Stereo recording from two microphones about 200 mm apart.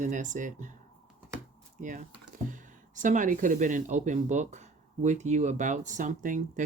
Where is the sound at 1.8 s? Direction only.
40° right (ahead or behind).